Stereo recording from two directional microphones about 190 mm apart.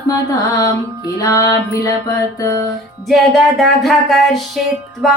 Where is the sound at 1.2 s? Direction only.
20° left (ahead or behind).